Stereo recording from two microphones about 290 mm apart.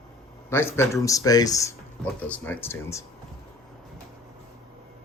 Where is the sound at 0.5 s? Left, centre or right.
Centre.